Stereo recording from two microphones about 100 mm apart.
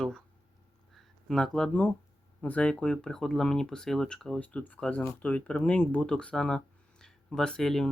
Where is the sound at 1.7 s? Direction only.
20° left (ahead or behind).